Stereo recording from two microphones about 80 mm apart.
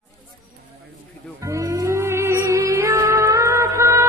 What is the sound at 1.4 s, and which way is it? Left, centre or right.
Music, right.